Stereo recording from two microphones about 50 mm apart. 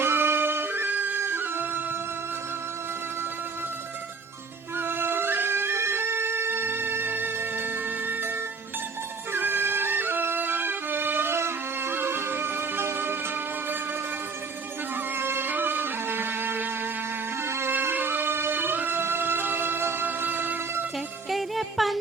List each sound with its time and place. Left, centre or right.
0.0 s music: right
4.8 s music: right
15.1 s music: right
20.1 s music: right
21.2 s music: centre